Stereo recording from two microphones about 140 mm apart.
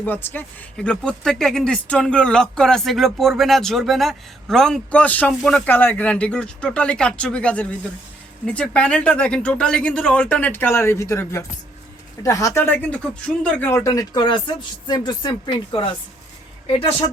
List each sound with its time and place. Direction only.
0.0 s speech: 15° left (ahead or behind)
5.6 s speech: 15° left (ahead or behind); by 15.9 s 35° left (ahead or behind)